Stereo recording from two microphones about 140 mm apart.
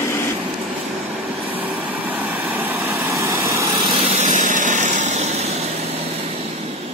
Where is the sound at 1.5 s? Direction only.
10° right (ahead or behind).